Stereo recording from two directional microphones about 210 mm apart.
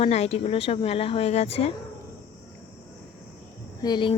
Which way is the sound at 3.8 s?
20° left (ahead or behind).